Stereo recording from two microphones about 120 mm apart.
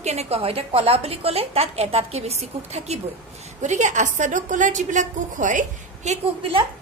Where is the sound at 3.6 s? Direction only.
85° right.